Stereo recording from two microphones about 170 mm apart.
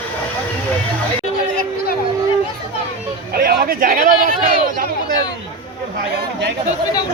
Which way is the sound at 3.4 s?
60° right (ahead or behind).